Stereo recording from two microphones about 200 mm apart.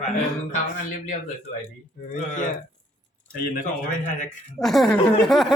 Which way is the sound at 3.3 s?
50° left (ahead or behind).